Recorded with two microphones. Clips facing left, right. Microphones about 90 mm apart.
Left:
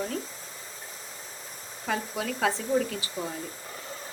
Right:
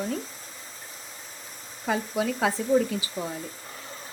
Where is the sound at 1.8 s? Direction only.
5° right (ahead or behind).